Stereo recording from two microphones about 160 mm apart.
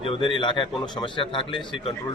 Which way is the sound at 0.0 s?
35° left (ahead or behind).